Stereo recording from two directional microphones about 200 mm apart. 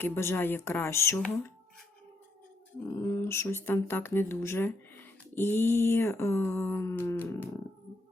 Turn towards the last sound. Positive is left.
turn(degrees=10)  # may be behind; listen again after turning